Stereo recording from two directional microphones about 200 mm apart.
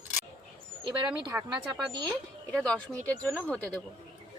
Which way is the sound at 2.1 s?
5° left (ahead or behind).